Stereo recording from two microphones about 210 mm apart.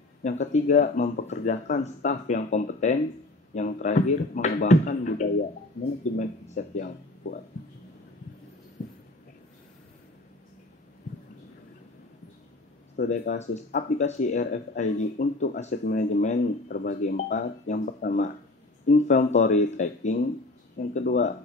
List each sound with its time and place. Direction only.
0.2 s speech: 35° left (ahead or behind)
8.8 s a sound: 35° left (ahead or behind)
12.9 s speech: 45° left (ahead or behind)